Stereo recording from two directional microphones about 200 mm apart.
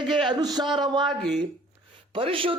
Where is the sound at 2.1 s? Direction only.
25° right (ahead or behind).